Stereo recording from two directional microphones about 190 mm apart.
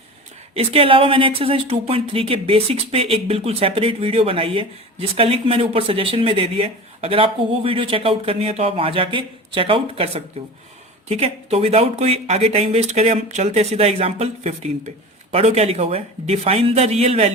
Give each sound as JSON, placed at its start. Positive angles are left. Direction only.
{"t": 0.5, "sound": "speech", "side_deg": -30}